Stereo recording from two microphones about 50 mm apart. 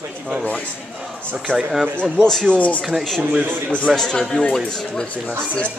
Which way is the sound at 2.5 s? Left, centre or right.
Left.